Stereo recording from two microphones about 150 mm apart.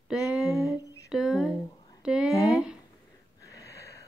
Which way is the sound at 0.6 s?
Centre (ahead or behind).